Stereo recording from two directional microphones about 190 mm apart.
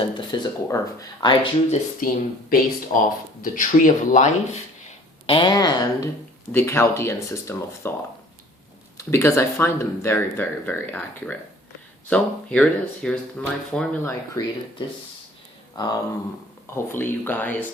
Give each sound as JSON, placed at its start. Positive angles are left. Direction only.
{"t": 0.0, "sound": "speech", "side_deg": 25}
{"t": 2.0, "sound": "speech", "side_deg": 45}
{"t": 5.2, "sound": "speech", "side_deg": 25}
{"t": 9.0, "sound": "speech", "side_deg": 15}